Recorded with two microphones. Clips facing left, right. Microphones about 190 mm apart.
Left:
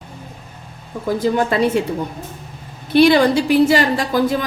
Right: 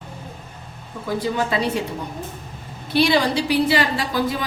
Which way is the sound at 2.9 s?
50° left (ahead or behind).